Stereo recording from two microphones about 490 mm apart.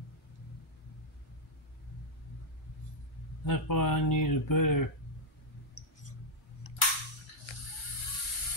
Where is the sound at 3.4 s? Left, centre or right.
Left.